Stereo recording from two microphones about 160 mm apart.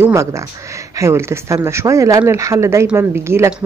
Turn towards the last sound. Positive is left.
turn(degrees=-15)  # may be behind; listen again after turning